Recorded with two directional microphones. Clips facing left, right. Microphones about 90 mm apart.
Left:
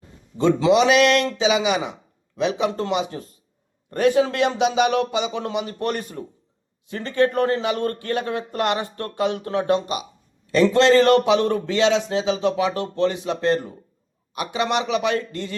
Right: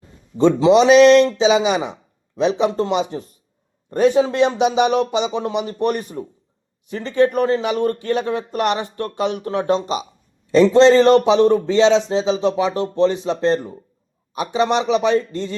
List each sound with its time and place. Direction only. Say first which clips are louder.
0.3 s speech: right 4 dB; 25° right (ahead or behind)